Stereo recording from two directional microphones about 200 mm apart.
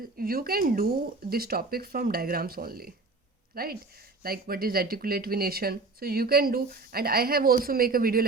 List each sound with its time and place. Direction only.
0.2 s speech: 50° right (ahead or behind)